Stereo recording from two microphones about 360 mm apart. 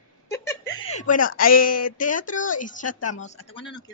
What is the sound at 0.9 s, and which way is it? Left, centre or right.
Speech, left.